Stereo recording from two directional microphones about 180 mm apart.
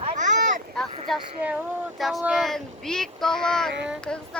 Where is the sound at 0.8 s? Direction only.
Centre (ahead or behind).